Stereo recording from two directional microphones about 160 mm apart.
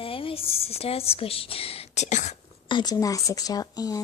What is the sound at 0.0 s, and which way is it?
A woman's voice, 35° left (ahead or behind).